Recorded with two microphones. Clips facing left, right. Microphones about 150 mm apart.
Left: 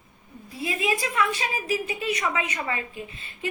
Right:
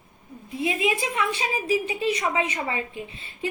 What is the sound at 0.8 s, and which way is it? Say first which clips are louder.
Speech: left 3 dB; 20° right (ahead or behind).